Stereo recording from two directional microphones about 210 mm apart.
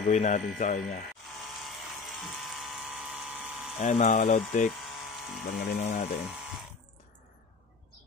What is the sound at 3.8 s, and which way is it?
Speech, 35° left (ahead or behind).